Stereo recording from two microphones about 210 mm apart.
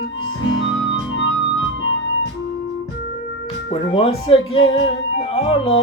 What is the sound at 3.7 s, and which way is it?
Music, 25° left (ahead or behind).